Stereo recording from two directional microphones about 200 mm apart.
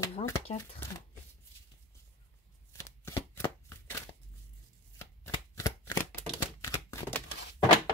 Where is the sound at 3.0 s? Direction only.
15° left (ahead or behind).